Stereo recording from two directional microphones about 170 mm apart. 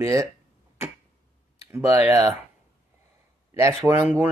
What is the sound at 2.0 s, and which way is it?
Speech, 20° right (ahead or behind).